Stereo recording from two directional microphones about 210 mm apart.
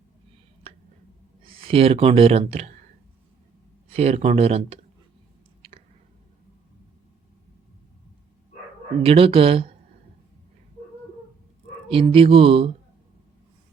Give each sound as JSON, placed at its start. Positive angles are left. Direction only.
{"t": 1.5, "sound": "speech", "side_deg": -25}
{"t": 3.8, "sound": "speech", "side_deg": -30}
{"t": 9.0, "sound": "speech", "side_deg": -25}
{"t": 11.9, "sound": "speech", "side_deg": -25}